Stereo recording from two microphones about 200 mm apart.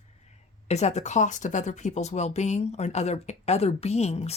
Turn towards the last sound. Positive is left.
turn(degrees=30)  # may be behind; listen again after turning